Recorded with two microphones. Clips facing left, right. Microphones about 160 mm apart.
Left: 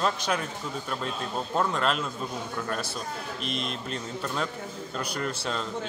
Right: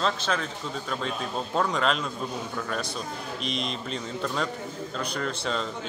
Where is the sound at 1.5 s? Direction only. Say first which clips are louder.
Right 1 dB; 5° left (ahead or behind).